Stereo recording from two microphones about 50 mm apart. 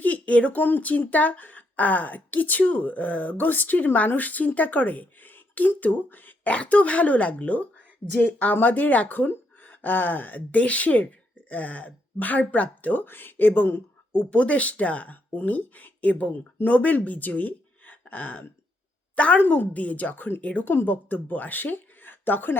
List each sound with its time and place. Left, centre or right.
0.0 s speech: left
6.5 s speech: left
8.0 s speech: right
8.5 s speech: left
13.0 s speech: left
14.1 s a woman's voice: left
19.4 s speech: left
20.4 s speech: left
20.7 s speech: left